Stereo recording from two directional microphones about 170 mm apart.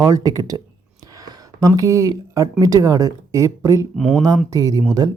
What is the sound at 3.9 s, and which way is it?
Speech, centre (ahead or behind).